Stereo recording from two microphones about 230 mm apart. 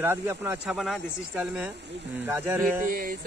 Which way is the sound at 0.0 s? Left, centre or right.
Centre.